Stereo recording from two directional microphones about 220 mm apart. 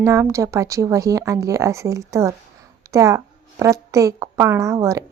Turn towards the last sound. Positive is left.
turn(degrees=-15)  # may be behind; listen again after turning